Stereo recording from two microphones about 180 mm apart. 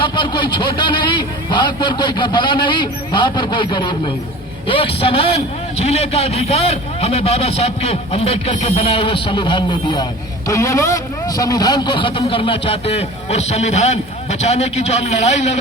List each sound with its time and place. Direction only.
0.0 s a man's voice: 25° left (ahead or behind)